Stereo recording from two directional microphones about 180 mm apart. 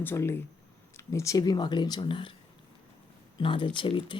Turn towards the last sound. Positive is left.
turn(degrees=25)  # may be behind; listen again after turning